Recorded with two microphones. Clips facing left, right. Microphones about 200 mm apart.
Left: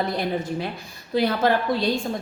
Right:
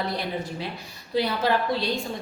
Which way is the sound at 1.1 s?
50° left (ahead or behind).